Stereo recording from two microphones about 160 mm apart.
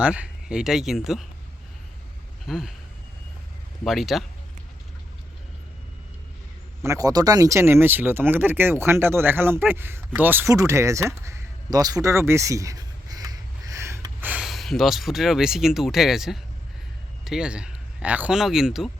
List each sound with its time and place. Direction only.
0.0 s speech: 5° right (ahead or behind)
2.5 s speech: centre (ahead or behind)
3.8 s speech: centre (ahead or behind)
6.8 s speech: 20° right (ahead or behind); by 18.9 s 5° right (ahead or behind)